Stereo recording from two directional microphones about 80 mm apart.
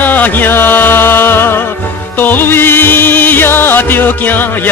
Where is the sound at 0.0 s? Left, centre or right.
Left.